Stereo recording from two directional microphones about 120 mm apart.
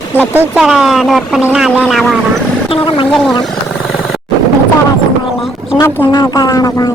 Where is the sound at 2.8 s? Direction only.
45° left (ahead or behind).